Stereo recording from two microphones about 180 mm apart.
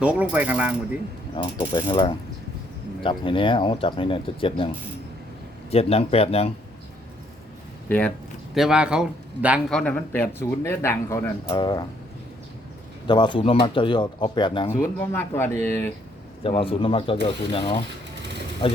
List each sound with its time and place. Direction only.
0.0 s mechanisms: 10° right (ahead or behind)
1.4 s speech: 25° left (ahead or behind)
5.7 s speech: 35° left (ahead or behind)
7.9 s speech: 10° left (ahead or behind)
8.5 s a man's voice: 5° right (ahead or behind)
9.7 s speech: 10° left (ahead or behind)
11.4 s speech: 25° left (ahead or behind)
13.1 s speech: 25° left (ahead or behind)
14.9 s speech: 10° left (ahead or behind)
16.4 s speech: 30° left (ahead or behind)